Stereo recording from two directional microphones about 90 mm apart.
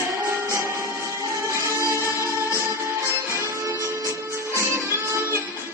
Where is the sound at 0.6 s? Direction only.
30° right (ahead or behind).